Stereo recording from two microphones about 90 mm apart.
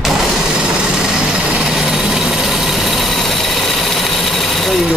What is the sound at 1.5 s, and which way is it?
Vehicle, 10° right (ahead or behind).